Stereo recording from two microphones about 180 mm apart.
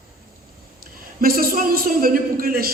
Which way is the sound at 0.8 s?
55° right (ahead or behind).